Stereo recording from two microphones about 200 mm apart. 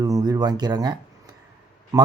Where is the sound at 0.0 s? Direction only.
20° right (ahead or behind).